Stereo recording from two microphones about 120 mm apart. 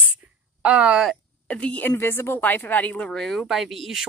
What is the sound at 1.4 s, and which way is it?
A woman's voice, 10° left (ahead or behind).